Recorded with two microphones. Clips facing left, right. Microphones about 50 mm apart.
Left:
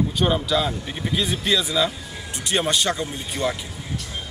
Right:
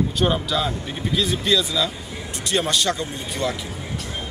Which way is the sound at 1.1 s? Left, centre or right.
Centre.